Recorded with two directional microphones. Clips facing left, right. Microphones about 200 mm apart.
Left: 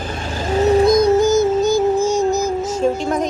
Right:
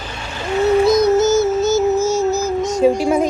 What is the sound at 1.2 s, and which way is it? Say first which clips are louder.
Music: even; 15° left (ahead or behind).